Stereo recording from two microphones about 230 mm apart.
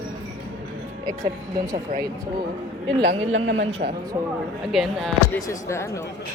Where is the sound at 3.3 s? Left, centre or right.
Right.